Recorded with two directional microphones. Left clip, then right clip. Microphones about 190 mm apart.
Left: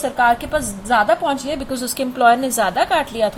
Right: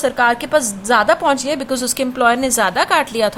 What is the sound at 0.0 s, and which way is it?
A woman's voice, 25° right (ahead or behind).